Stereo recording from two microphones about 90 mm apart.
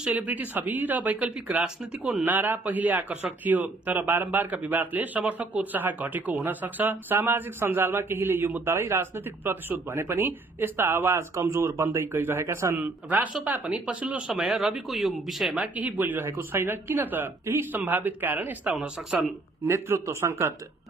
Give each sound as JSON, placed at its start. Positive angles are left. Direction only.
{"t": 0.0, "sound": "speech", "side_deg": -15}
{"t": 14.3, "sound": "speech", "side_deg": 0}
{"t": 15.5, "sound": "speech", "side_deg": -15}
{"t": 18.8, "sound": "speech", "side_deg": -5}
{"t": 19.6, "sound": "speech", "side_deg": -30}